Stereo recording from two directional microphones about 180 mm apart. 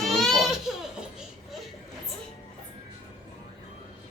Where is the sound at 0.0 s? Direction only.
Centre (ahead or behind).